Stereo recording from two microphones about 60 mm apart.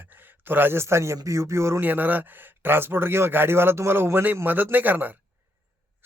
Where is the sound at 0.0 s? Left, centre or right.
Right.